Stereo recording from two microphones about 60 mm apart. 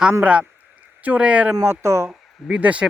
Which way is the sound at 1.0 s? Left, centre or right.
Right.